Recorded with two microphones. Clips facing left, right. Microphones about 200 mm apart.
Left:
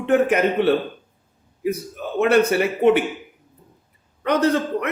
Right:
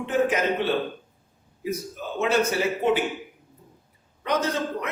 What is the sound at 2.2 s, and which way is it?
Speech, 60° left (ahead or behind).